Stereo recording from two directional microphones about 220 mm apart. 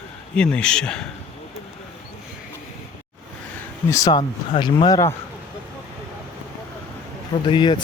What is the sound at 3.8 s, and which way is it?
Speech, 15° left (ahead or behind).